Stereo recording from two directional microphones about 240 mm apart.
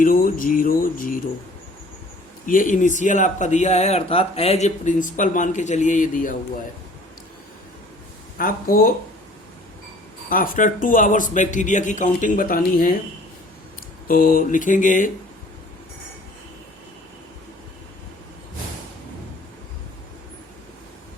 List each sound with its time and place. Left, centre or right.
0.0 s speech: left
2.5 s speech: left
8.4 s speech: left
10.2 s speech: left
14.1 s speech: left